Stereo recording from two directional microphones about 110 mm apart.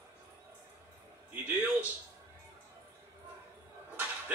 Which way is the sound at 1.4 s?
15° right (ahead or behind).